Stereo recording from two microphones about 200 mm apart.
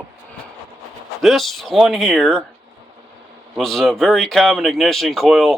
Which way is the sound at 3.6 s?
Centre (ahead or behind).